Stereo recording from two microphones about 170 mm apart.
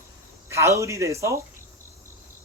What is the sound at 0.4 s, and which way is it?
Speech, 15° right (ahead or behind).